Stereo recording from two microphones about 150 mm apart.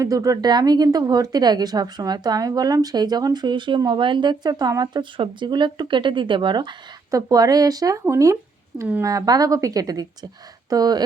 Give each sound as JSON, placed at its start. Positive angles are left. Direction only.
{"t": 0.0, "sound": "speech", "side_deg": -20}